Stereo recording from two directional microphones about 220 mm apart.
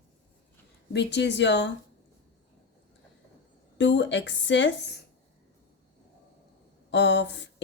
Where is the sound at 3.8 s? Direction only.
55° left (ahead or behind).